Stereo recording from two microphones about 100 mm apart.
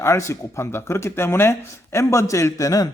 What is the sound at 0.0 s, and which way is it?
A man's voice, 30° left (ahead or behind).